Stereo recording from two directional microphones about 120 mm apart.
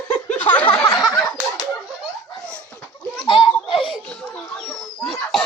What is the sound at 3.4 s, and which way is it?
Baby laughter, 45° left (ahead or behind).